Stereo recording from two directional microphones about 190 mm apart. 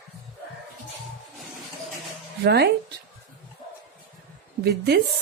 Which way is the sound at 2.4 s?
60° right (ahead or behind).